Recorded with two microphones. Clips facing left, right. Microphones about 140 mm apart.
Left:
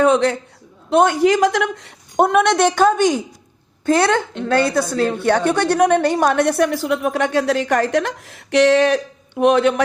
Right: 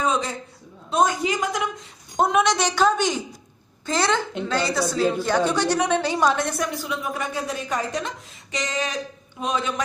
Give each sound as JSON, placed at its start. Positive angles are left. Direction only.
{"t": 0.0, "sound": "a woman's voice", "side_deg": 65}